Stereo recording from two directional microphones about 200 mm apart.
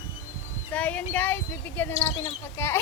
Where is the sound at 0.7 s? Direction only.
5° left (ahead or behind).